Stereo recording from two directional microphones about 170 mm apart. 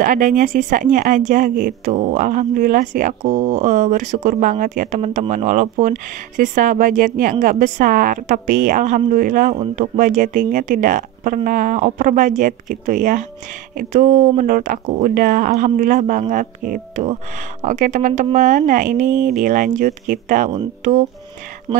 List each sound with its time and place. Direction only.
0.0 s speech: 50° right (ahead or behind)